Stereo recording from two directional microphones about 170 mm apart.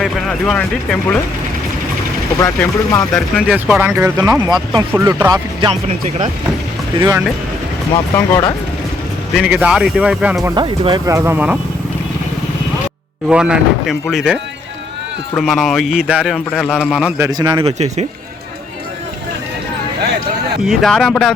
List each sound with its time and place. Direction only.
0.0 s speech: centre (ahead or behind)
2.4 s speech: 15° left (ahead or behind)
3.1 s speech: 5° right (ahead or behind); by 4.8 s 25° right (ahead or behind)
4.9 s speech: 10° right (ahead or behind)
5.3 s a man's voice: 30° right (ahead or behind)
8.1 s speech: 25° left (ahead or behind)
9.3 s speech: 5° right (ahead or behind)
10.5 s speech: 25° right (ahead or behind); by 11.6 s 10° right (ahead or behind)
13.2 s speech: 5° right (ahead or behind)
15.4 s speech: centre (ahead or behind)
17.2 s a man's voice: 20° right (ahead or behind)
17.7 s speech: 40° right (ahead or behind)
20.7 s speech: 5° left (ahead or behind)